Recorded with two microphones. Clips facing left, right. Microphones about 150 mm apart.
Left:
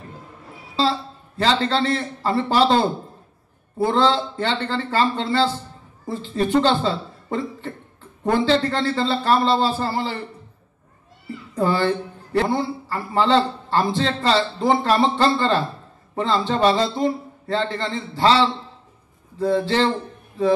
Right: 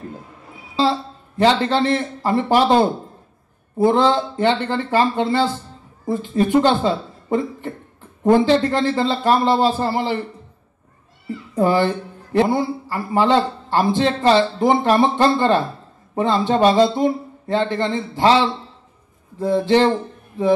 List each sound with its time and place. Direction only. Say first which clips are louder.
0.7 s a man's voice: right 3 dB; 15° right (ahead or behind)
11.5 s a man's voice: right 3 dB; 15° right (ahead or behind)